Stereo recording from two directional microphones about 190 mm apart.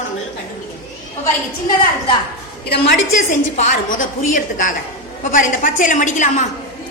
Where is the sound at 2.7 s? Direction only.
60° left (ahead or behind).